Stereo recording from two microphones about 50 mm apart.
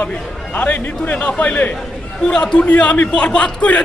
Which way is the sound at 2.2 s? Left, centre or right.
Centre.